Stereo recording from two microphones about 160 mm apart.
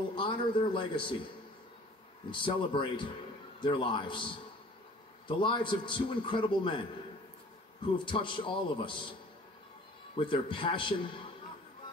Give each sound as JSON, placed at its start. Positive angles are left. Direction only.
{"t": 0.1, "sound": "a man's voice", "side_deg": 30}
{"t": 2.3, "sound": "a man's voice", "side_deg": 30}
{"t": 8.0, "sound": "a man's voice", "side_deg": 30}
{"t": 10.1, "sound": "a man's voice", "side_deg": 30}